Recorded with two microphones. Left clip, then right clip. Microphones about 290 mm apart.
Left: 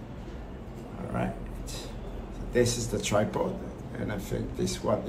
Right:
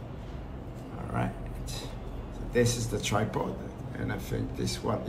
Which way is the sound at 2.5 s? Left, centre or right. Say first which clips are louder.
Left 1 dB; centre.